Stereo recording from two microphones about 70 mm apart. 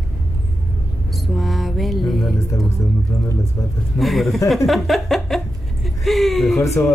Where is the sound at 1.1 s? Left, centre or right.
Centre.